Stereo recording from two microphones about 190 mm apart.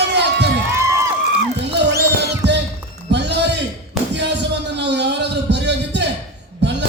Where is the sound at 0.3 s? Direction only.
65° right (ahead or behind).